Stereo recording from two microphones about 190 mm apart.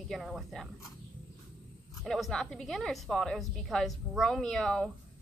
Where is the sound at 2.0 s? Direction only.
Centre (ahead or behind).